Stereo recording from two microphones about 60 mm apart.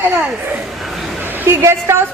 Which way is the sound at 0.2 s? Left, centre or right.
Right.